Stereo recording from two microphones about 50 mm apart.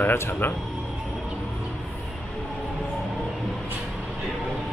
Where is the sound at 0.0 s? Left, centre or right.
Left.